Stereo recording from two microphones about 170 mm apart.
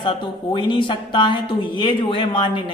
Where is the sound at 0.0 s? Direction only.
30° left (ahead or behind).